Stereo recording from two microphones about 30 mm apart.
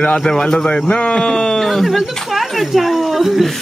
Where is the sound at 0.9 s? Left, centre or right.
Left.